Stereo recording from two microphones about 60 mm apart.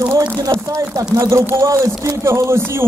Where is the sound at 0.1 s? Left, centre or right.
Right.